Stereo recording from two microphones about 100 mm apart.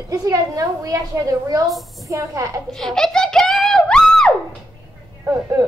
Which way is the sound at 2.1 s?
30° right (ahead or behind).